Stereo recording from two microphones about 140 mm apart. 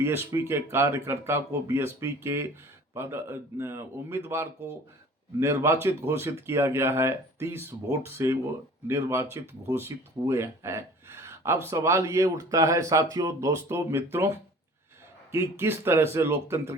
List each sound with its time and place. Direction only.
0.0 s speech: 15° right (ahead or behind)